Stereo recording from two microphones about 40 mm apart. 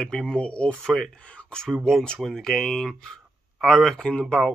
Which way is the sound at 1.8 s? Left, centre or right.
Centre.